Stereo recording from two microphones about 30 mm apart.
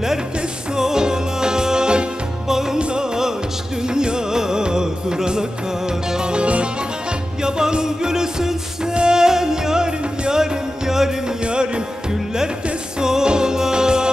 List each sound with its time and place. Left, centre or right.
0.7 s music: right
2.4 s music: centre
2.8 s music: right
7.4 s music: right
8.9 s music: right
9.2 s music: centre
11.4 s music: right
13.0 s music: right